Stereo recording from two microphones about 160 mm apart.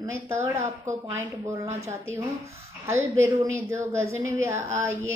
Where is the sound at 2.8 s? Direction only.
15° right (ahead or behind).